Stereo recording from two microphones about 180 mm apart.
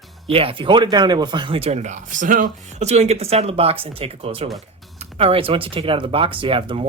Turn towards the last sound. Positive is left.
turn(degrees=-30)  # may be behind; listen again after turning